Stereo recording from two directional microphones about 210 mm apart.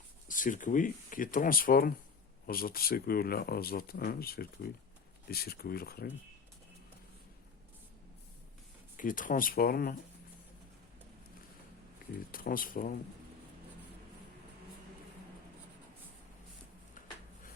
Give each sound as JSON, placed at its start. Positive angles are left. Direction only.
{"t": 0.3, "sound": "speech", "side_deg": 40}
{"t": 9.0, "sound": "speech", "side_deg": 40}
{"t": 12.3, "sound": "speech", "side_deg": 45}